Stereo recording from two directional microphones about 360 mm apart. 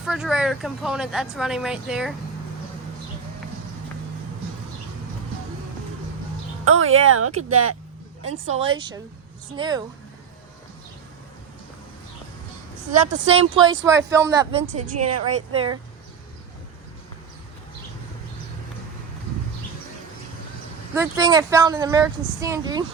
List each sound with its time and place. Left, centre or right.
0.0 s speech: centre
6.7 s speech: right
8.5 s speech: centre
12.9 s speech: centre
14.8 s speech: right
15.3 s speech: centre
20.9 s speech: centre